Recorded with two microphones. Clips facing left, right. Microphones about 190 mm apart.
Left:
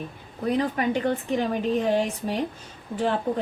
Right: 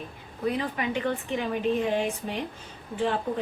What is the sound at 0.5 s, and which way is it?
A woman's voice, 40° left (ahead or behind).